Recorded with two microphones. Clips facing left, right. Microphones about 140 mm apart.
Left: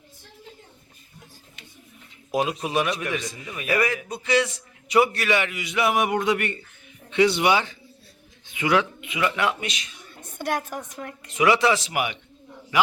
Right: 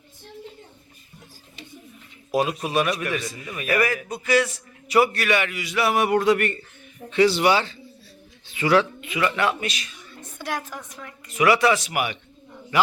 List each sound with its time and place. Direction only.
2.6 s a man's voice: 20° left (ahead or behind)
10.1 s a sound: 50° left (ahead or behind)
11.3 s a man's voice: 20° left (ahead or behind)